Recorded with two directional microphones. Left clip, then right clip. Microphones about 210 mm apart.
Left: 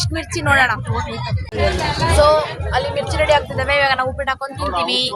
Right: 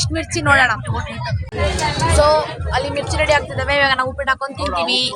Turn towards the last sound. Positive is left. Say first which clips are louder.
# even
turn(degrees=-5)  # may be behind; listen again after turning